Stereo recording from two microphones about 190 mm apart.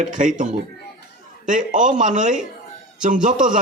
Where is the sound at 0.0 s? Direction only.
45° right (ahead or behind).